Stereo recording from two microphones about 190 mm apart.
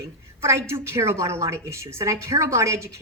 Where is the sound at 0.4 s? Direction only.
15° right (ahead or behind).